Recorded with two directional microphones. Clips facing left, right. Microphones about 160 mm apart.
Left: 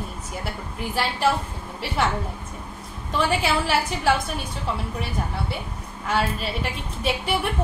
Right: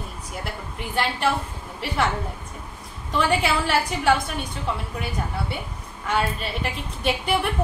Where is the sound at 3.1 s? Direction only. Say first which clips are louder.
Right 1 dB; centre (ahead or behind).